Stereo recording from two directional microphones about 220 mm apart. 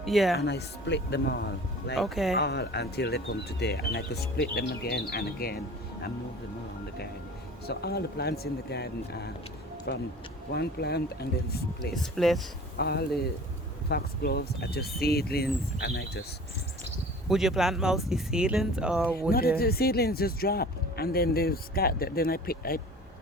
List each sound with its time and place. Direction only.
0.0 s speech: centre (ahead or behind)
0.3 s speech: 50° left (ahead or behind)
2.0 s speech: centre (ahead or behind)
2.3 s speech: 50° left (ahead or behind)
7.7 s speech: 45° left (ahead or behind)
11.8 s speech: centre (ahead or behind)
12.7 s speech: 45° left (ahead or behind)
17.2 s speech: centre (ahead or behind)
19.3 s speech: 45° left (ahead or behind)